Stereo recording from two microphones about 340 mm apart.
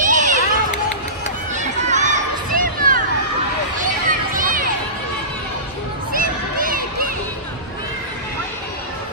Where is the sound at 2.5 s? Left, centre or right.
Right.